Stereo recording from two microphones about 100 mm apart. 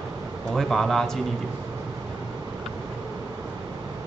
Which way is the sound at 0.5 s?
Centre (ahead or behind).